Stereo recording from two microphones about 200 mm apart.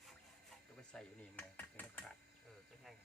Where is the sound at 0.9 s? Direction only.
5° left (ahead or behind).